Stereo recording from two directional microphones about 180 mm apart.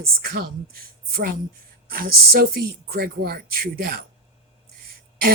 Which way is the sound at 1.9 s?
55° right (ahead or behind).